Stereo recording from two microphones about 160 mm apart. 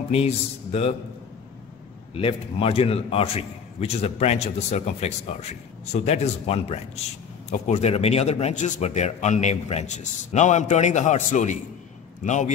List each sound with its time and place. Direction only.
0.1 s a man's voice: 40° left (ahead or behind)
2.1 s a man's voice: 35° left (ahead or behind)